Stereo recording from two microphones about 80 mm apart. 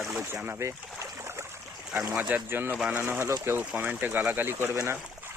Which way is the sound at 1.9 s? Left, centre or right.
Right.